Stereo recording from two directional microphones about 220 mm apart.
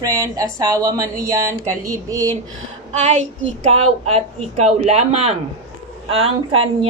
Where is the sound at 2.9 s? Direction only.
30° right (ahead or behind).